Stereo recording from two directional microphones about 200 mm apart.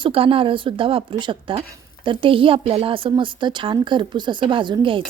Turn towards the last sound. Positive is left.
turn(degrees=-25)  # may be behind; listen again after turning